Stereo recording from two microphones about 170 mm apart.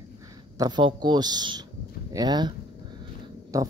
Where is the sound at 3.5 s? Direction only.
20° right (ahead or behind).